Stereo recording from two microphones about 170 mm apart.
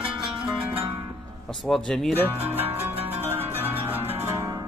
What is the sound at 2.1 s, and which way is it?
Speech, 10° right (ahead or behind).